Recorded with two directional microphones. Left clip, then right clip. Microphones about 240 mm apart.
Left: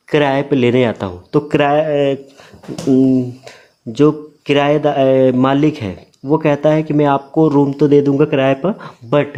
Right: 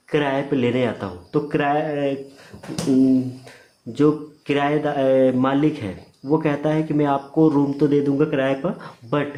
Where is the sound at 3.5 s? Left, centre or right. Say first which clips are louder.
Left 6 dB; left.